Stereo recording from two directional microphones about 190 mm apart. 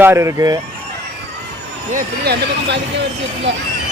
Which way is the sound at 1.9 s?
55° right (ahead or behind).